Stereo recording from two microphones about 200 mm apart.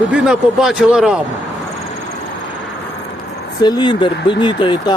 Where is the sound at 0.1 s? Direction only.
Centre (ahead or behind).